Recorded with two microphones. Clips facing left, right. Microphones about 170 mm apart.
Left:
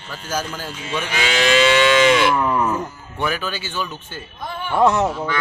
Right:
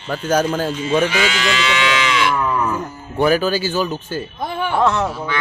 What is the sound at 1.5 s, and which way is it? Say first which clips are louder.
Livestock: left 5 dB; 50° left (ahead or behind).